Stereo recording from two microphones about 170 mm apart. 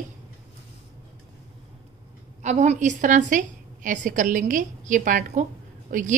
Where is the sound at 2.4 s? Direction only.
45° right (ahead or behind).